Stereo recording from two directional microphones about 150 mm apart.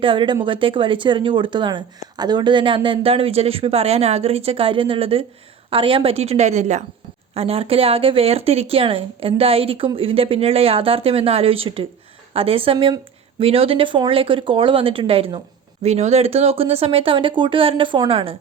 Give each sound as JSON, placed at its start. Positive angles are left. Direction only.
{"t": 0.0, "sound": "a woman's voice", "side_deg": -35}
{"t": 7.3, "sound": "speech", "side_deg": -40}